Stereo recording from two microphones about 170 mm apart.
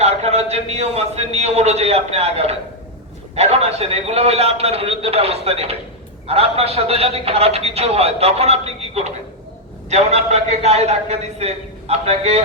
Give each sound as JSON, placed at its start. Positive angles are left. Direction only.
{"t": 0.0, "sound": "a man's voice", "side_deg": -40}